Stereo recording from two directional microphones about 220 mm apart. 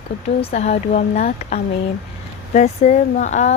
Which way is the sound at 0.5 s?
30° left (ahead or behind).